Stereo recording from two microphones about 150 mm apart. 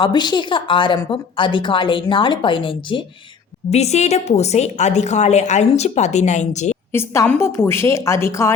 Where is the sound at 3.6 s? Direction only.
45° left (ahead or behind).